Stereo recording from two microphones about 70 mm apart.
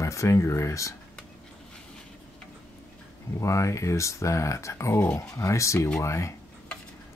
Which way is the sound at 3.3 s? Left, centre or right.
Left.